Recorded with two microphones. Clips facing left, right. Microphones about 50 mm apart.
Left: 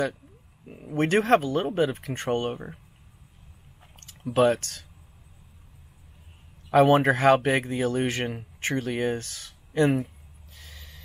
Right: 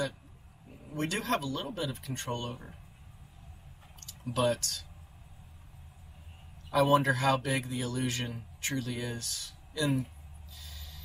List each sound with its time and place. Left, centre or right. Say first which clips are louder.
0.9 s a man's voice: left 11 dB; left
4.0 s speech: left 8 dB; left
6.7 s a man's voice: left 7 dB; left
10.5 s snort: left 3 dB; left